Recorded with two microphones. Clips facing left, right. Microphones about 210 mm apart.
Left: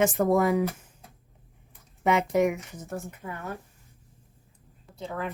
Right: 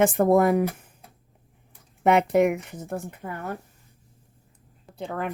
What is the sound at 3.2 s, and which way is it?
Speech, 45° right (ahead or behind).